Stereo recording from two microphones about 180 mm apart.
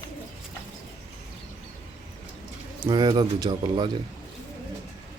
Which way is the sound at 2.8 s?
20° right (ahead or behind).